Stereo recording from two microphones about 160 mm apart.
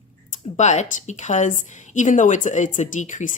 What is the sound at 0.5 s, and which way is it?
Speech, 45° left (ahead or behind).